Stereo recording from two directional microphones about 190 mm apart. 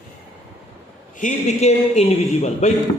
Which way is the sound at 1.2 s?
35° left (ahead or behind).